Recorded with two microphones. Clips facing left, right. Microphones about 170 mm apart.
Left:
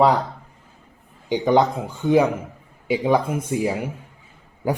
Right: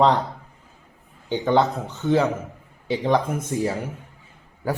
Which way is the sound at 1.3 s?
15° left (ahead or behind).